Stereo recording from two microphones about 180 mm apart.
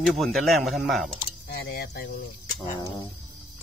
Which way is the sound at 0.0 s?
Centre (ahead or behind).